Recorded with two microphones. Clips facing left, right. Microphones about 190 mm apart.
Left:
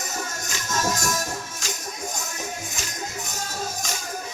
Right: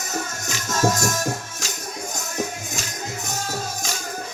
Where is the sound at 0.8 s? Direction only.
45° right (ahead or behind).